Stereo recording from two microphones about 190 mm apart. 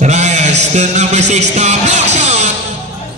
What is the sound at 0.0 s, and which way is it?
Music, 35° right (ahead or behind).